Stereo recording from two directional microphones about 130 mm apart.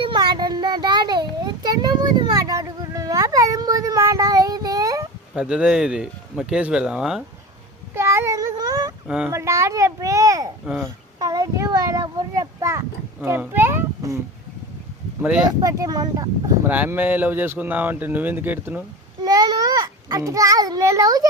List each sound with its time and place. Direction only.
0.0 s child singing: 35° right (ahead or behind)
5.3 s speech: 5° right (ahead or behind)
7.9 s child singing: 20° right (ahead or behind)
9.0 s speech: 10° right (ahead or behind)
9.3 s a child's voice: 20° right (ahead or behind)
11.2 s a sound: 25° right (ahead or behind)
13.2 s speech: 15° right (ahead or behind)
15.6 s speech: 30° right (ahead or behind)
16.6 s speech: 15° right (ahead or behind)
19.2 s a child's voice: 30° right (ahead or behind)